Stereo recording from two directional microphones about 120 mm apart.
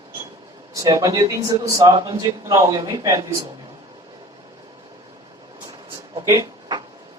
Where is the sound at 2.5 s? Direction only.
30° right (ahead or behind).